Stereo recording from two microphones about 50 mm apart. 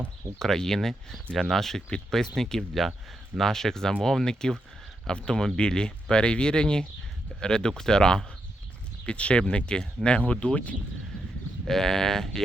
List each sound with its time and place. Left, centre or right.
0.3 s speech: centre; by 10.8 s left
11.6 s speech: centre